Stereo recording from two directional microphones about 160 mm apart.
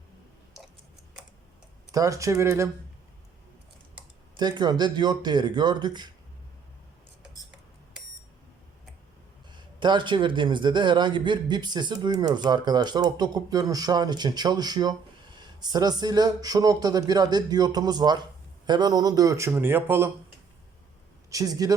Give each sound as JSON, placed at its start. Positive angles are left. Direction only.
{"t": 1.9, "sound": "a man's voice", "side_deg": -20}
{"t": 4.4, "sound": "a man's voice", "side_deg": -25}
{"t": 9.8, "sound": "a man's voice", "side_deg": -30}
{"t": 21.2, "sound": "speech", "side_deg": -20}